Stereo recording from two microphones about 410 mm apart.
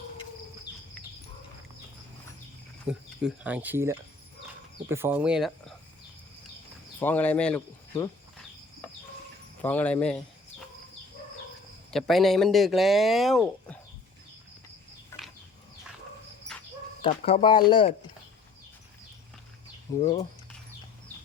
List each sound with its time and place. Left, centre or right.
2.8 s speech: centre
7.0 s speech: centre
9.6 s speech: centre
11.9 s speech: centre
17.0 s speech: centre
19.9 s speech: centre